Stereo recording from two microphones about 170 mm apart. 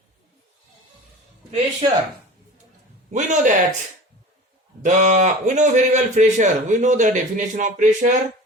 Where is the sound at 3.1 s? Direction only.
50° right (ahead or behind).